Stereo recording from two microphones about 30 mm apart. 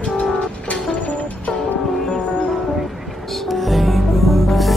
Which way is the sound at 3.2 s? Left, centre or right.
Centre.